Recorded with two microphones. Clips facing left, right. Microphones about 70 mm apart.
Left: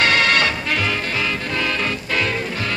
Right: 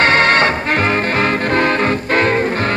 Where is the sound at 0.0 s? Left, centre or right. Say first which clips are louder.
Right 5 dB; right.